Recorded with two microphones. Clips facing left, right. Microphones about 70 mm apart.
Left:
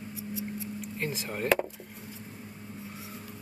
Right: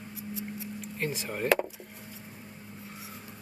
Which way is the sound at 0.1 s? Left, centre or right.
Centre.